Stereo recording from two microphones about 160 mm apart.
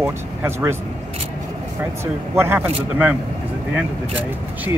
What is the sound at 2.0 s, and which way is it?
Speech, 15° right (ahead or behind).